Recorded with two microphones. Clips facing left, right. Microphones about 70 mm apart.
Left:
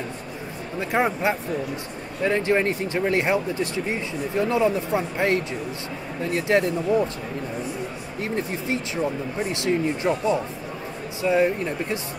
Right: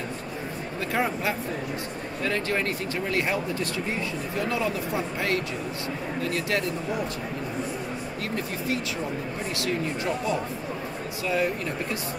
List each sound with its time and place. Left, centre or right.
0.7 s speech: left
8.2 s speech: left